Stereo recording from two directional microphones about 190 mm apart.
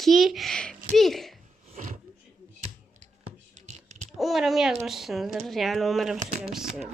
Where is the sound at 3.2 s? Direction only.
35° right (ahead or behind).